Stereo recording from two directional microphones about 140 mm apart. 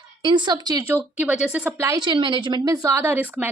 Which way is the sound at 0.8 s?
15° right (ahead or behind).